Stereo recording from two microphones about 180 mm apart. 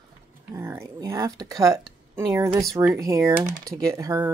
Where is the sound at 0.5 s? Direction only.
15° right (ahead or behind).